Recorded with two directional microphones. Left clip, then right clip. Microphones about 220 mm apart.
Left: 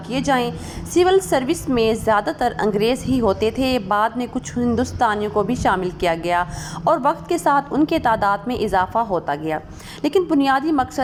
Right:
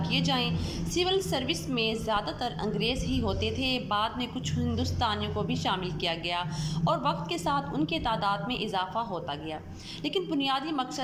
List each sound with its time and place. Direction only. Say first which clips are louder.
0.1 s a woman's voice: left 10 dB; 30° left (ahead or behind)